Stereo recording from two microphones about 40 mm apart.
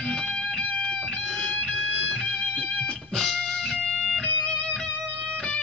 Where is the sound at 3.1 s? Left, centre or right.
Centre.